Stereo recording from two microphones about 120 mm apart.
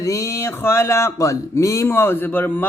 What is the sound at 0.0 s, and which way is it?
Music, 25° left (ahead or behind).